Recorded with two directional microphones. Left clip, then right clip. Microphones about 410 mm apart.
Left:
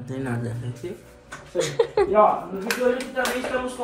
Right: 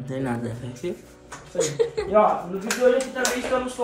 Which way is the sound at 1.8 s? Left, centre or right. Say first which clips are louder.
Left 2 dB; centre.